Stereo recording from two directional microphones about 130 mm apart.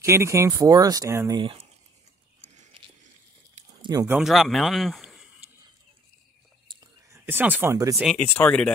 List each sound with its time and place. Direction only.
0.0 s speech: 20° right (ahead or behind)
1.4 s speech: 45° right (ahead or behind)
3.8 s speech: 25° right (ahead or behind)
4.2 s speech: centre (ahead or behind)
6.7 s whispering: 30° right (ahead or behind)
7.2 s speech: 15° right (ahead or behind)
7.7 s speech: 25° right (ahead or behind)
8.3 s speech: 15° left (ahead or behind)